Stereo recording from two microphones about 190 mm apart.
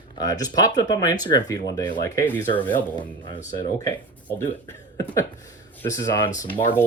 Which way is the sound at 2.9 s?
25° left (ahead or behind).